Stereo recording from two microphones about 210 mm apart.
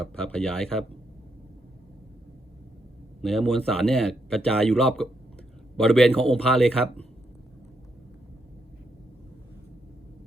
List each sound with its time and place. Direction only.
0.0 s speech: 5° left (ahead or behind)
3.2 s speech: centre (ahead or behind)